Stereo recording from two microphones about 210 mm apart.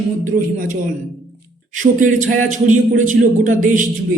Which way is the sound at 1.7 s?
40° right (ahead or behind).